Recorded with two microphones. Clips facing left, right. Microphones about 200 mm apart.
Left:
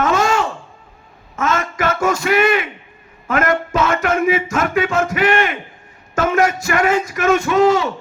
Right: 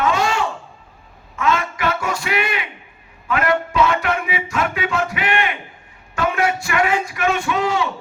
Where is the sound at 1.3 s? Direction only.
45° left (ahead or behind).